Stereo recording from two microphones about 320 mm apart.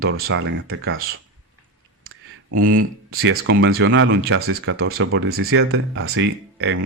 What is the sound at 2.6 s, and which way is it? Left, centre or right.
Speech, right.